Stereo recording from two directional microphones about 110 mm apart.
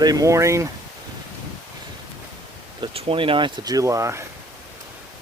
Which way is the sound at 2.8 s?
60° right (ahead or behind).